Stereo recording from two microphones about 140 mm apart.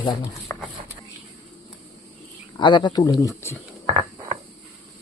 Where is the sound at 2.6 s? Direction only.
35° left (ahead or behind).